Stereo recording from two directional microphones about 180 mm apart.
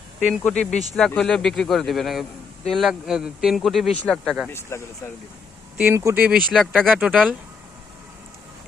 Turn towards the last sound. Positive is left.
turn(degrees=0)  # may be behind; listen again after turning